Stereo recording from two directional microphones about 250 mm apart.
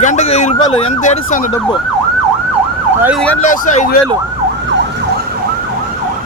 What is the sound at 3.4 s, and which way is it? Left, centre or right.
Speech, left.